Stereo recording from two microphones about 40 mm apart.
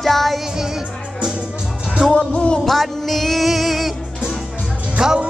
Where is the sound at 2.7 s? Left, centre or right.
Centre.